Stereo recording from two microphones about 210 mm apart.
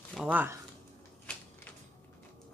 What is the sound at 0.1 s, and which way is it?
Speech, 5° right (ahead or behind).